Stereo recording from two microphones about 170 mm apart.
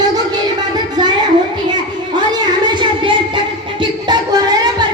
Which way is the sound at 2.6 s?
30° right (ahead or behind).